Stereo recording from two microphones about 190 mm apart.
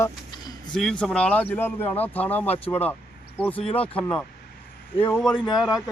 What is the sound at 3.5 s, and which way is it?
Speech, 30° left (ahead or behind).